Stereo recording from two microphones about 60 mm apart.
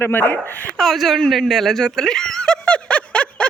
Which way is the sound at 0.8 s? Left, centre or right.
Centre.